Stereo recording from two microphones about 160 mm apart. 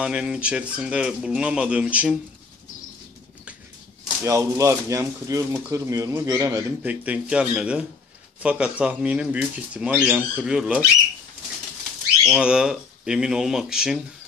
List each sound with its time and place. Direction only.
0.0 s speech: 5° right (ahead or behind)
4.2 s speech: 20° right (ahead or behind)
12.4 s speech: 5° right (ahead or behind)